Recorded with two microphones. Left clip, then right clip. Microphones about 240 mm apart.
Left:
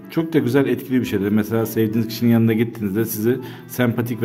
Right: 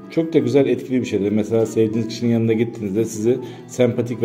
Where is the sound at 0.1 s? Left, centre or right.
Left.